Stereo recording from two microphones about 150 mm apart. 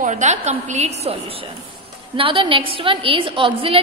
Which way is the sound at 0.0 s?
50° right (ahead or behind).